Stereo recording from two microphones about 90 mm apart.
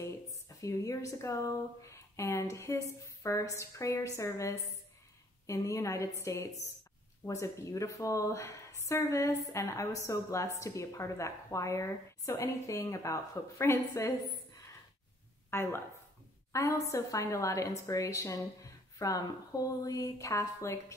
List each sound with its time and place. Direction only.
0.0 s a woman's voice: 35° left (ahead or behind)
15.5 s a woman's voice: 25° left (ahead or behind)